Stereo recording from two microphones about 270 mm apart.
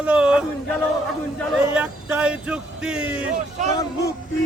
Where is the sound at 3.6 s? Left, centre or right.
Right.